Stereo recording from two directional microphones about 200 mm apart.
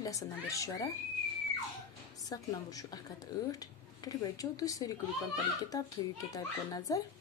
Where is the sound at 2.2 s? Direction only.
20° left (ahead or behind).